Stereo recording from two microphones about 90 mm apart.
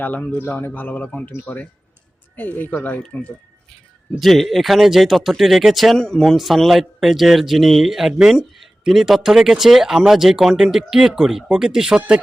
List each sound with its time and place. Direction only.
0.0 s speech: 20° left (ahead or behind)
4.2 s speech: centre (ahead or behind)